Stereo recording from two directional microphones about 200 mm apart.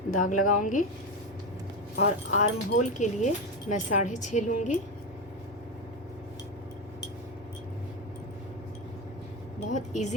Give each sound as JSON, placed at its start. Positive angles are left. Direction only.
{"t": 0.2, "sound": "speech", "side_deg": 40}
{"t": 2.0, "sound": "speech", "side_deg": 35}
{"t": 9.6, "sound": "speech", "side_deg": 35}